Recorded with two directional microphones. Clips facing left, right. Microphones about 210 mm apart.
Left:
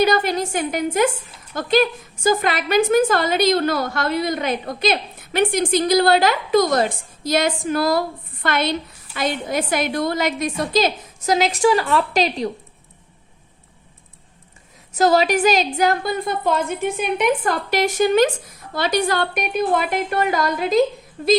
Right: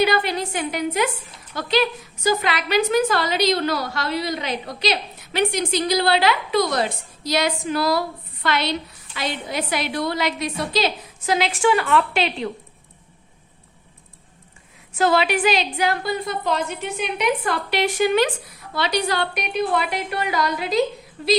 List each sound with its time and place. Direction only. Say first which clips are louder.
0.0 s a woman's voice: left 2 dB; 45° left (ahead or behind)
14.9 s a woman's voice: left 3 dB; 40° left (ahead or behind)